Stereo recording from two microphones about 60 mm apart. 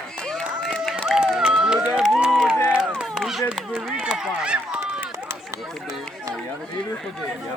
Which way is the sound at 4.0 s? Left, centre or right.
Centre.